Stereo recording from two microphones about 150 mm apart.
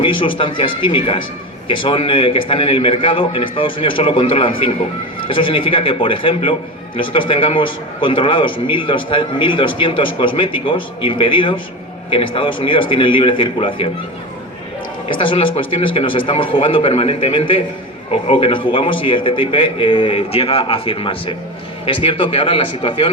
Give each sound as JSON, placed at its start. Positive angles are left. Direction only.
{"t": 0.0, "sound": "a man's voice", "side_deg": 35}
{"t": 15.1, "sound": "a man's voice", "side_deg": 35}